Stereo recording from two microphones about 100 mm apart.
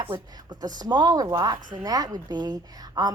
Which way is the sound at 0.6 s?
40° right (ahead or behind).